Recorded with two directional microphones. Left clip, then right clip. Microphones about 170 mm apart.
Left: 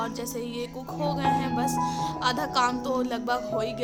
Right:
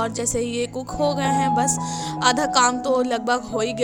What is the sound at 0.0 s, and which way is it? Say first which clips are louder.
Music: right 8 dB; 40° right (ahead or behind).